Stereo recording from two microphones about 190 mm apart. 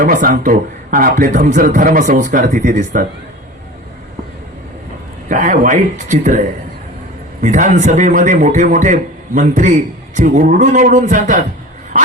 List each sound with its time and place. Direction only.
0.0 s speech: 50° right (ahead or behind)
5.3 s a man's voice: 45° right (ahead or behind)